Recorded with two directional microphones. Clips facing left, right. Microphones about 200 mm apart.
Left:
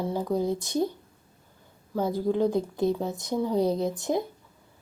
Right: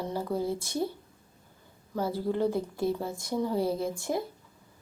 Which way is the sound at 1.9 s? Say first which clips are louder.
Left 4 dB; 15° left (ahead or behind).